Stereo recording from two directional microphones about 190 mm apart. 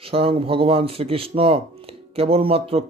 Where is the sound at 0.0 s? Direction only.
30° right (ahead or behind).